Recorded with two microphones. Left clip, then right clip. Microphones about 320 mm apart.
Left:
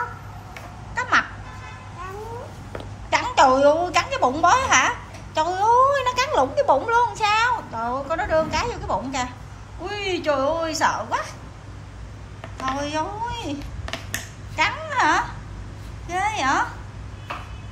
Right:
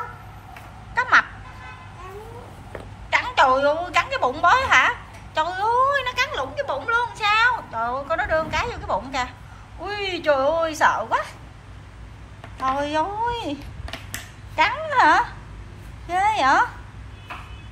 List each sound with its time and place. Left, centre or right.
0.9 s music: centre
3.1 s a woman's voice: centre
12.5 s a sound: centre